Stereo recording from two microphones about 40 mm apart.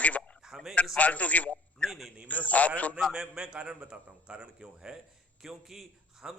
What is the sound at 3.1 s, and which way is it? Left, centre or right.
A man's voice, centre.